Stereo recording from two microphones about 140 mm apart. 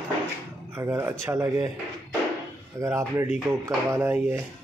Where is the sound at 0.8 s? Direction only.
20° right (ahead or behind).